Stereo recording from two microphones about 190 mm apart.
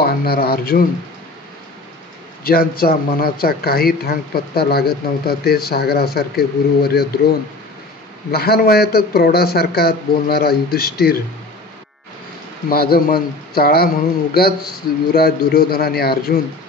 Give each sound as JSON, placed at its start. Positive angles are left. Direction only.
{"t": 0.0, "sound": "speech", "side_deg": 55}
{"t": 2.4, "sound": "speech", "side_deg": 50}
{"t": 12.6, "sound": "a man's voice", "side_deg": 55}